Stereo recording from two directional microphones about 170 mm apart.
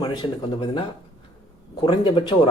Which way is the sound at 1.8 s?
30° left (ahead or behind).